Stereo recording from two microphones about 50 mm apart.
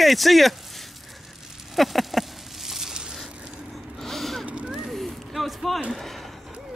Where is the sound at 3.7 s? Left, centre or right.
Centre.